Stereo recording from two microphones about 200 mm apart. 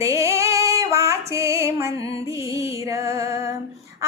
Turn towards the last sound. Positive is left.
turn(degrees=-15)  # may be behind; listen again after turning